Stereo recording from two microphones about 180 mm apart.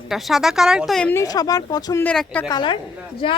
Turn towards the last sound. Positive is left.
turn(degrees=30)  # may be behind; listen again after turning